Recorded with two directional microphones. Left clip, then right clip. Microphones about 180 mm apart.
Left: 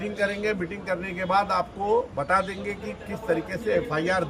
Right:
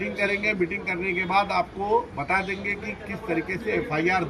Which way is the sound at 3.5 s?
20° left (ahead or behind).